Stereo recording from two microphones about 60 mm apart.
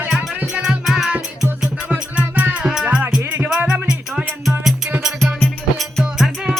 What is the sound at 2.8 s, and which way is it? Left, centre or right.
Music, right.